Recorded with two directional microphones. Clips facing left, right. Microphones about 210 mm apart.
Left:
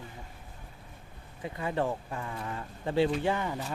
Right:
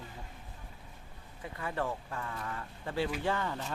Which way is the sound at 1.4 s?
20° left (ahead or behind).